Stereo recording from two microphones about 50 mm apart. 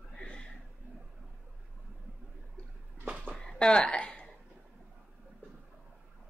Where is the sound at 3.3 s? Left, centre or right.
Centre.